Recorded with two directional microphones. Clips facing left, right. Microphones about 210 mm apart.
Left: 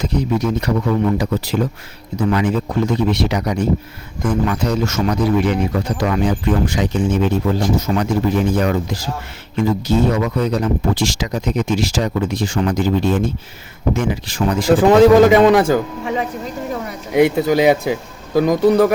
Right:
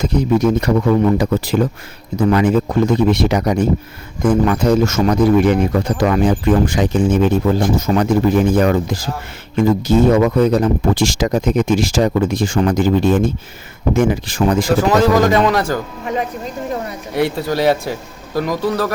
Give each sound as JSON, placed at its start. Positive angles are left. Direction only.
{"t": 0.0, "sound": "speech", "side_deg": -50}
{"t": 15.3, "sound": "a man's voice", "side_deg": 20}
{"t": 17.2, "sound": "a man's voice", "side_deg": 20}